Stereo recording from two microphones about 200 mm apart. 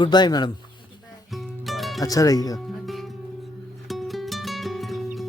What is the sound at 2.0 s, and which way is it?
Speech, 15° left (ahead or behind).